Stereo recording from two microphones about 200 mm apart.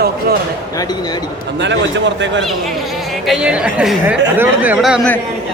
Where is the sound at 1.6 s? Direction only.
65° right (ahead or behind).